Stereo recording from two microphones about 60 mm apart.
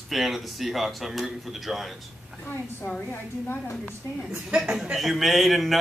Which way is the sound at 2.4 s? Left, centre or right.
Left.